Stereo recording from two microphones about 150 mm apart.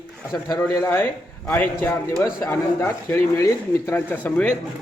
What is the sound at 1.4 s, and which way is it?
Speech, 10° left (ahead or behind).